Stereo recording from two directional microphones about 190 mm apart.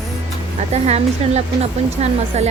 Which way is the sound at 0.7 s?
35° right (ahead or behind).